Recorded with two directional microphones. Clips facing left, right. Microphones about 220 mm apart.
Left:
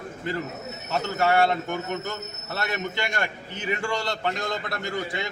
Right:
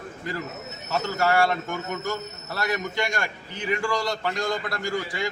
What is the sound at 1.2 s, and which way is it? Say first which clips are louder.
A man's voice: left 1 dB; 25° left (ahead or behind).